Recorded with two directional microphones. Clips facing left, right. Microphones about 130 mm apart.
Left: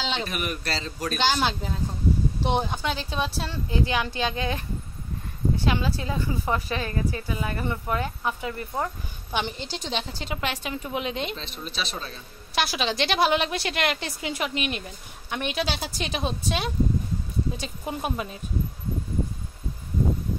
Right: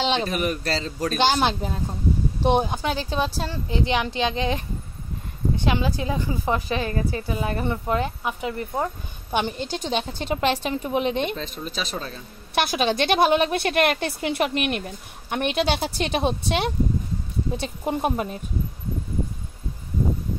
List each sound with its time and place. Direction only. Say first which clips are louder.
0.1 s a man's voice: right 6 dB; 35° right (ahead or behind)
1.2 s a woman's voice: right 3 dB; 20° right (ahead or behind)
2.9 s a man's voice: right 3 dB; 40° right (ahead or behind)
3.6 s a woman's voice: right 2 dB; 25° right (ahead or behind)
9.3 s a woman's voice: right 5 dB; 50° right (ahead or behind)
10.2 s a woman's voice: right 7 dB; 35° right (ahead or behind)
11.2 s a woman's voice: right 5 dB; 45° right (ahead or behind); by 16.7 s 65° right (ahead or behind)
17.6 s a woman's voice: right 6 dB; 45° right (ahead or behind)